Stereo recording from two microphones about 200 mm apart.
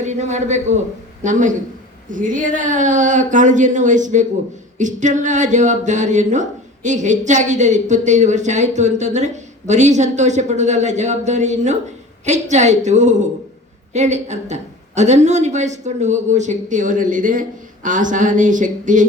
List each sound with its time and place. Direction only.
0.0 s a man's voice: 35° right (ahead or behind)